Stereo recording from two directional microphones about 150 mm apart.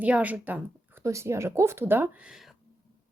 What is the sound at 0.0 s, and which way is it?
A woman's voice, 10° right (ahead or behind).